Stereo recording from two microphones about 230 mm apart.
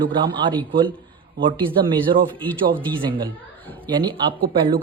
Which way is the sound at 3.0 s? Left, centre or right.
Right.